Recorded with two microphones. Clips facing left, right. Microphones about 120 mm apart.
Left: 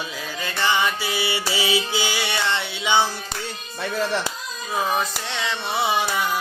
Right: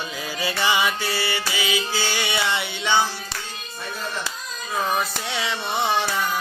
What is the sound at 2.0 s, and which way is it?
Mantra, 10° left (ahead or behind).